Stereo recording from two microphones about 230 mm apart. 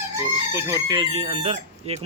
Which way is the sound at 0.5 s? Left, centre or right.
Centre.